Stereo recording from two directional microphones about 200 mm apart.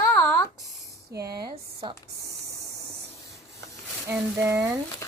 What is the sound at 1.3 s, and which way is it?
Speech, 20° right (ahead or behind).